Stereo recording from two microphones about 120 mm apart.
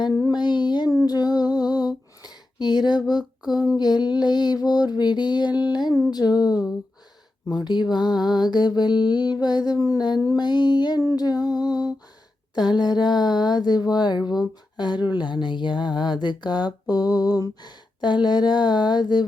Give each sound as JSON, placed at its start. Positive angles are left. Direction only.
{"t": 0.0, "sound": "music", "side_deg": 35}
{"t": 3.8, "sound": "speech", "side_deg": 35}